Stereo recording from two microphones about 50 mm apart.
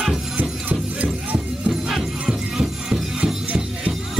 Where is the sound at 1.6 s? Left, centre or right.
Centre.